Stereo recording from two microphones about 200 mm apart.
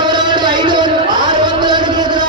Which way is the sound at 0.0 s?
20° right (ahead or behind).